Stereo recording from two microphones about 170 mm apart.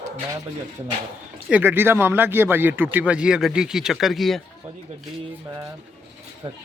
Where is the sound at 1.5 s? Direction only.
10° right (ahead or behind).